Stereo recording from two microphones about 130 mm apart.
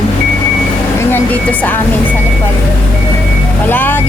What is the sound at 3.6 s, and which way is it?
Speech, 15° left (ahead or behind).